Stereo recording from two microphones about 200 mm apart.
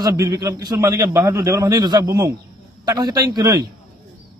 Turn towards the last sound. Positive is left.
turn(degrees=-20)  # may be behind; listen again after turning